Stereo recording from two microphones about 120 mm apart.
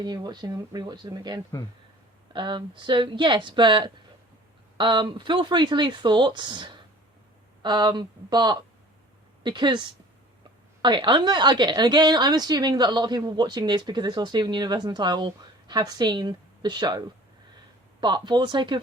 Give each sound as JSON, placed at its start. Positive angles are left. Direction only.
{"t": 0.0, "sound": "a woman's voice", "side_deg": -35}
{"t": 10.8, "sound": "a woman's voice", "side_deg": -40}
{"t": 18.0, "sound": "a woman's voice", "side_deg": -40}